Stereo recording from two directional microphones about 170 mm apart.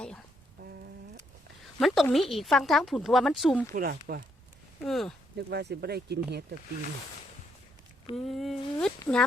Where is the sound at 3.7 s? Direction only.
60° right (ahead or behind).